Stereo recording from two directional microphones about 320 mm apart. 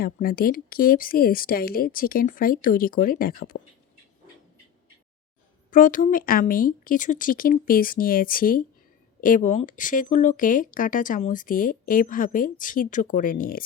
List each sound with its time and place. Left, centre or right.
0.0 s speech: left
5.7 s speech: left